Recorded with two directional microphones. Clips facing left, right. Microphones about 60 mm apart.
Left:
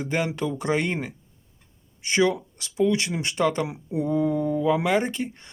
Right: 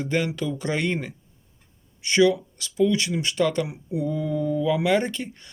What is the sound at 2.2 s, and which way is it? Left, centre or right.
Speech, left.